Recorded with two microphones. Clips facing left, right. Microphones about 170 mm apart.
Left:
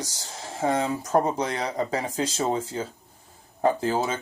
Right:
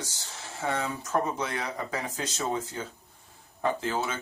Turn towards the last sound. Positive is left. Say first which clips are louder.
# left 5 dB
turn(degrees=35)  # may be behind; listen again after turning